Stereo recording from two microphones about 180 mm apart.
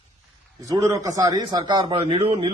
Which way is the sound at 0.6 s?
20° right (ahead or behind).